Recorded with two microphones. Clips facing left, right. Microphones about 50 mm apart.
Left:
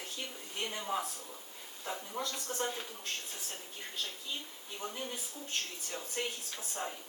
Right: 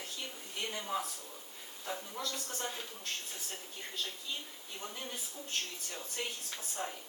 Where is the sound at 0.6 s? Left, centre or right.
Centre; by 2.7 s left.